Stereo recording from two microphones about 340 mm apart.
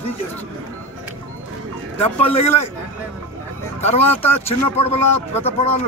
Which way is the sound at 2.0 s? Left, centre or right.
Centre.